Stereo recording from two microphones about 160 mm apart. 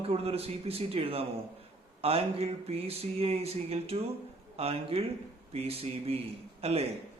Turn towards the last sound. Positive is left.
turn(degrees=-40)  # may be behind; listen again after turning